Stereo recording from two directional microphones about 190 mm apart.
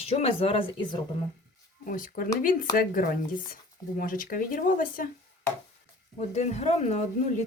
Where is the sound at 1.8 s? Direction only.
45° left (ahead or behind).